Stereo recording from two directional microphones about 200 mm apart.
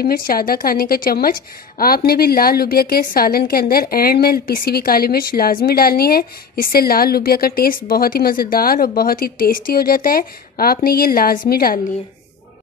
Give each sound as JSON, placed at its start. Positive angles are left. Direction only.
{"t": 0.0, "sound": "a woman's voice", "side_deg": 50}